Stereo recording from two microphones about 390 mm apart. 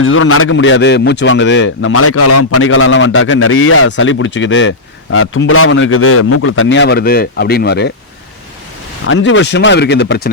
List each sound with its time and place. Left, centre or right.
0.0 s speech: left
9.0 s speech: left